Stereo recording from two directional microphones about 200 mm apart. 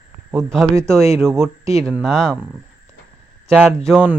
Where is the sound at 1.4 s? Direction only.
15° right (ahead or behind).